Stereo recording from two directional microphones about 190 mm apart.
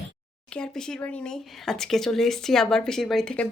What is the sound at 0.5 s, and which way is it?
Speech, 5° left (ahead or behind).